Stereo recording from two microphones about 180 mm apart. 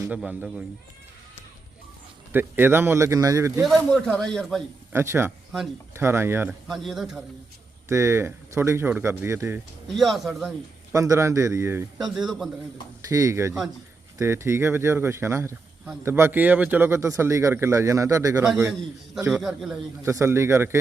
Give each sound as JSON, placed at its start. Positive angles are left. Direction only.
{"t": 0.0, "sound": "speech", "side_deg": -10}
{"t": 2.3, "sound": "speech", "side_deg": -10}
{"t": 3.9, "sound": "a man's voice", "side_deg": 5}
{"t": 4.9, "sound": "speech", "side_deg": -15}
{"t": 6.5, "sound": "a man's voice", "side_deg": 0}
{"t": 7.9, "sound": "speech", "side_deg": -15}
{"t": 9.8, "sound": "a man's voice", "side_deg": 0}
{"t": 10.9, "sound": "speech", "side_deg": -15}
{"t": 11.9, "sound": "a man's voice", "side_deg": -5}
{"t": 13.1, "sound": "speech", "side_deg": -20}
{"t": 19.3, "sound": "a man's voice", "side_deg": -5}
{"t": 20.0, "sound": "speech", "side_deg": -15}